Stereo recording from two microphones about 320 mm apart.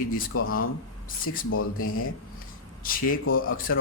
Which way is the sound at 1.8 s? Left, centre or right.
Left.